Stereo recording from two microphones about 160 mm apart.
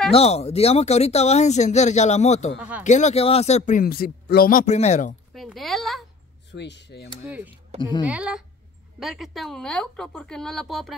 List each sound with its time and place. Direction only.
0.1 s speech: 40° left (ahead or behind)
3.8 s speech: 70° left (ahead or behind); by 5.1 s 45° left (ahead or behind)
5.3 s speech: centre (ahead or behind)
6.5 s speech: 90° left
7.2 s a woman's voice: 10° right (ahead or behind)